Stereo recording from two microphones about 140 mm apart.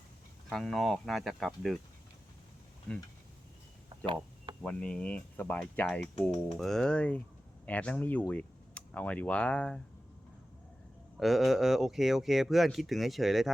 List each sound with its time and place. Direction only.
0.5 s speech: centre (ahead or behind)
4.0 s a sound: 40° right (ahead or behind)
4.6 s speech: 10° left (ahead or behind)
11.2 s speech: centre (ahead or behind)